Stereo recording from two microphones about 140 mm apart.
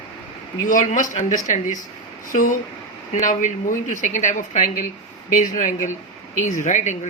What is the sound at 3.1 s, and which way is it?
A woman's voice, 60° left (ahead or behind).